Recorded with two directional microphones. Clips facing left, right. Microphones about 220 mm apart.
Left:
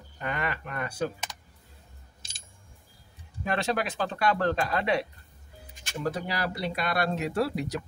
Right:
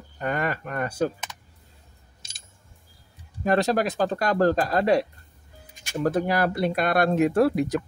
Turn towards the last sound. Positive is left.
turn(degrees=-50)  # may be behind; listen again after turning